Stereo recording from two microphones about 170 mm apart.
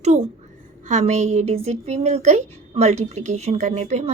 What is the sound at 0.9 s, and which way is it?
A woman's voice, 45° right (ahead or behind).